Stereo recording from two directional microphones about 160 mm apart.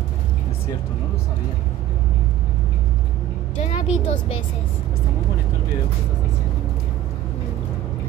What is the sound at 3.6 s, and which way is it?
Speech, 40° left (ahead or behind).